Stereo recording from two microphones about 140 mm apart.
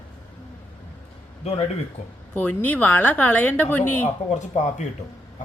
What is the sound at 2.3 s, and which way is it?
A woman's voice, 10° left (ahead or behind).